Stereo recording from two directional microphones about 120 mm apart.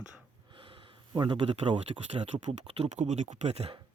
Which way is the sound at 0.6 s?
50° right (ahead or behind).